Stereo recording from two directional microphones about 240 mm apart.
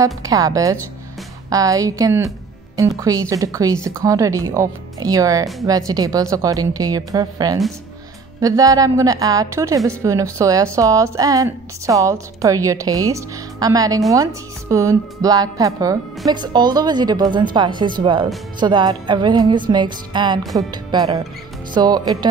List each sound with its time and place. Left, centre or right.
0.0 s a woman's voice: centre
16.3 s music: centre
21.7 s a woman's voice: centre